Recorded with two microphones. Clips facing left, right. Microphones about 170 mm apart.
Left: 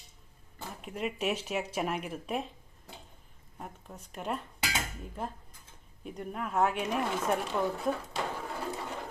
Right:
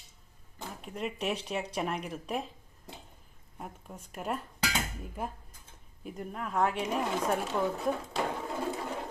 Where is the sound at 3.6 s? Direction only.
5° right (ahead or behind).